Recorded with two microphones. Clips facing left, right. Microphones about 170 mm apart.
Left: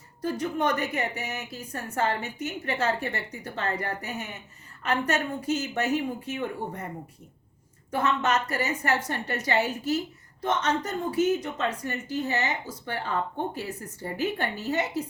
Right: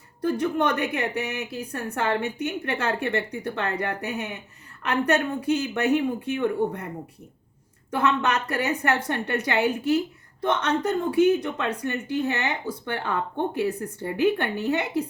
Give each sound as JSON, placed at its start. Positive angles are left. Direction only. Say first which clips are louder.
{"t": 0.2, "sound": "a woman's voice", "louder": "right 4 dB", "side_deg": -60}
{"t": 7.9, "sound": "a woman's voice", "louder": "right 2 dB", "side_deg": -65}